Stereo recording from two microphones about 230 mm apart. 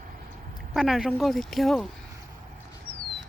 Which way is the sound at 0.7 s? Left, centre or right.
Centre.